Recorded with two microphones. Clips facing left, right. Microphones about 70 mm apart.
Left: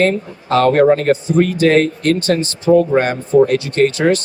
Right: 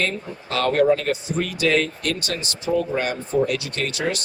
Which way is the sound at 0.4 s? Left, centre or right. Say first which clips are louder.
Left 7 dB; left.